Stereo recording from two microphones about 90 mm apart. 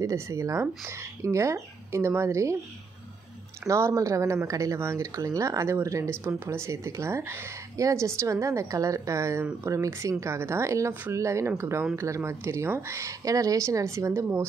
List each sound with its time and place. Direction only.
0.0 s speech: 35° right (ahead or behind)
3.6 s speech: 35° right (ahead or behind)